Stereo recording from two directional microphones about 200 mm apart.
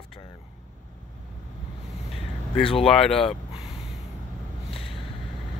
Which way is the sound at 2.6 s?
25° left (ahead or behind).